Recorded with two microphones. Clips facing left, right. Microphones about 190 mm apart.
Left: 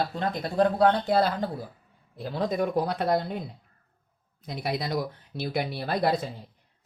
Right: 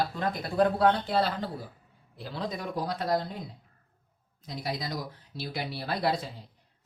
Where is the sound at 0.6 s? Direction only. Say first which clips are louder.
Left 2 dB; 45° left (ahead or behind); by 3.4 s 60° left (ahead or behind).